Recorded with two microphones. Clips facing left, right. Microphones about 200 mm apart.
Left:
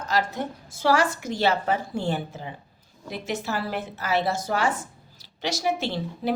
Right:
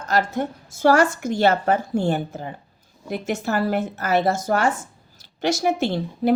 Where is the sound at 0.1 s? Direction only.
50° right (ahead or behind).